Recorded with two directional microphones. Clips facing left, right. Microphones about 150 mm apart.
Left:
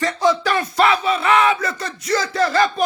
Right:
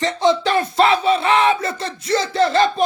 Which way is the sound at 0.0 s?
20° right (ahead or behind).